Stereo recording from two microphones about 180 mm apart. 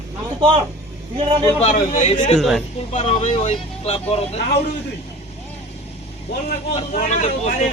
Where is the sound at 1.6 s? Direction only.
45° left (ahead or behind).